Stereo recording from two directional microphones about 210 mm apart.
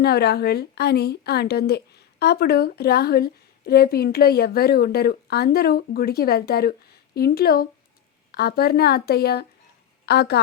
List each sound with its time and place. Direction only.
0.0 s a woman's voice: 50° left (ahead or behind)